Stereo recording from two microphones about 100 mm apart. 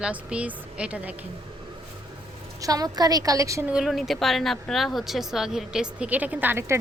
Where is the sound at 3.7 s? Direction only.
5° right (ahead or behind).